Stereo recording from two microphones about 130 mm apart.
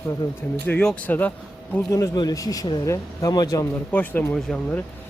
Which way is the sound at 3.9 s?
10° left (ahead or behind).